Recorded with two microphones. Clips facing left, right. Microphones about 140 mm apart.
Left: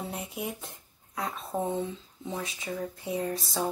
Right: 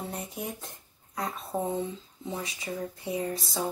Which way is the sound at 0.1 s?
5° left (ahead or behind).